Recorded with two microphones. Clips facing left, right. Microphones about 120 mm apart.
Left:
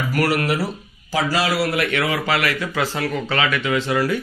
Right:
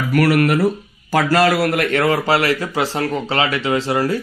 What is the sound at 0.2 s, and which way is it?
Speech, 60° right (ahead or behind).